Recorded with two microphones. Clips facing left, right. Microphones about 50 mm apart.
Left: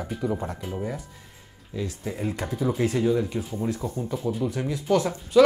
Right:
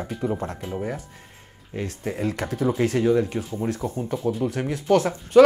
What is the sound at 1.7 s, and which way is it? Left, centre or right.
Speech, right.